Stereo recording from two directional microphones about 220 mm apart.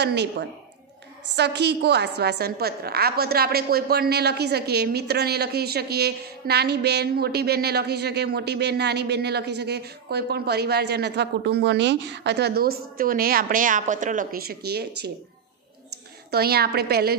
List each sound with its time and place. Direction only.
0.0 s a woman's voice: 50° right (ahead or behind)
16.3 s a woman's voice: 45° right (ahead or behind)